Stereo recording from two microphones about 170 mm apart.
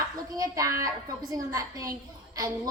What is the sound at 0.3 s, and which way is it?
A woman's voice, 20° right (ahead or behind).